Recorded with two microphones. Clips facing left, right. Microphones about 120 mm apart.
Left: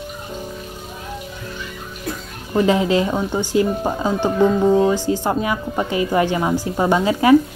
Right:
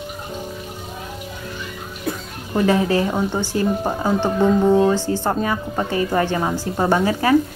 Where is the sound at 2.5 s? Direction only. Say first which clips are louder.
Left 1 dB; 20° left (ahead or behind).